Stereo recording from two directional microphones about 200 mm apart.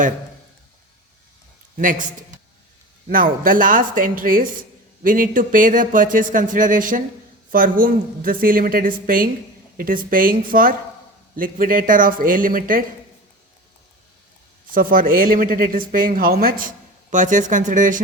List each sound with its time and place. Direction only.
1.8 s a man's voice: 40° right (ahead or behind)
14.7 s a woman's voice: 45° right (ahead or behind)